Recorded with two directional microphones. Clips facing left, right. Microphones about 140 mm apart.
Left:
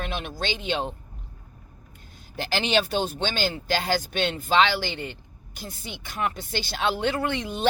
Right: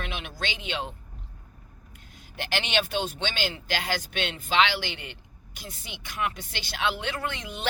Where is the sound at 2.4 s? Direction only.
35° left (ahead or behind).